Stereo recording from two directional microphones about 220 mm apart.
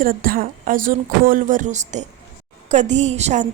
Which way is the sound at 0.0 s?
40° right (ahead or behind).